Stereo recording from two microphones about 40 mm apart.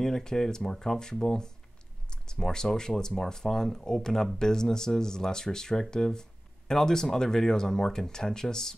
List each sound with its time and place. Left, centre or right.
0.0 s speech: centre